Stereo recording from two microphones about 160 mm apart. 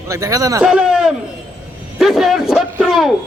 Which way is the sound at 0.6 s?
5° right (ahead or behind).